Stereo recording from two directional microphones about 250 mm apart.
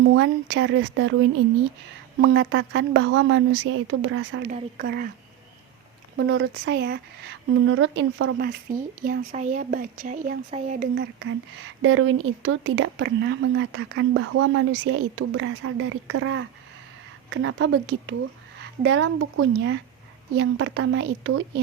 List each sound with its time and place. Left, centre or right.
0.1 s speech: right
2.1 s speech: right
4.8 s speech: right
6.1 s speech: right
10.9 s speech: right